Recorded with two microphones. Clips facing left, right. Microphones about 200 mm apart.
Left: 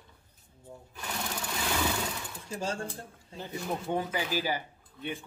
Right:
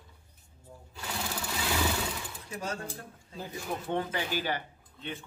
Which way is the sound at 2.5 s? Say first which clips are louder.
Left 3 dB; 30° left (ahead or behind).